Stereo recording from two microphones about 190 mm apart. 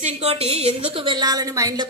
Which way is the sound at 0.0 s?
30° right (ahead or behind).